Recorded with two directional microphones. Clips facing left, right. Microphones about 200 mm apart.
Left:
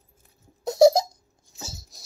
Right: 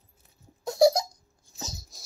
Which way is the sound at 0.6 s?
25° left (ahead or behind).